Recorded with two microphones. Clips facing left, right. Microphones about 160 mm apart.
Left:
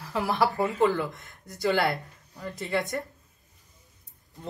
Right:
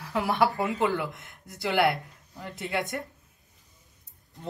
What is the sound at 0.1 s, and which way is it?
Speech, centre (ahead or behind).